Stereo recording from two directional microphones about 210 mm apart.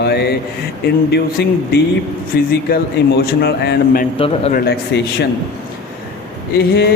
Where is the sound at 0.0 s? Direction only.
50° left (ahead or behind).